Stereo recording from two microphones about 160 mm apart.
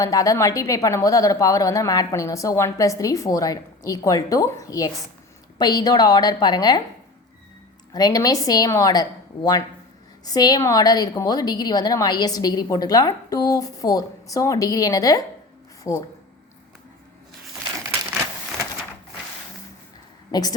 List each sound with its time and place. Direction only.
0.0 s a woman's voice: 20° left (ahead or behind)
7.9 s a woman's voice: 25° left (ahead or behind)
20.3 s a woman's voice: 25° left (ahead or behind)